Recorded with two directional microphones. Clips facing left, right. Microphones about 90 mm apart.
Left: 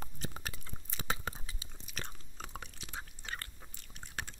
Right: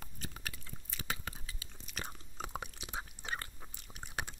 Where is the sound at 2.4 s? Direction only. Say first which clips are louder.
Right 4 dB; 15° right (ahead or behind).